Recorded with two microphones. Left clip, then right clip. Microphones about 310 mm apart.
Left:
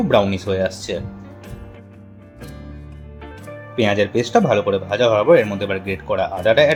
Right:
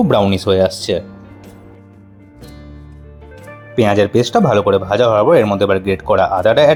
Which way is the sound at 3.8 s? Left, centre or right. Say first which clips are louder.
Right 5 dB; right.